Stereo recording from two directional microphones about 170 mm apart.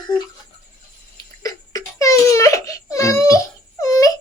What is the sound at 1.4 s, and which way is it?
Crying, 20° left (ahead or behind).